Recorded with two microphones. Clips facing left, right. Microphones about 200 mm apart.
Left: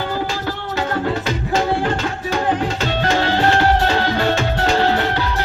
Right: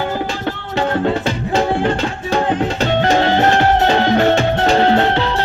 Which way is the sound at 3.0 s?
20° right (ahead or behind).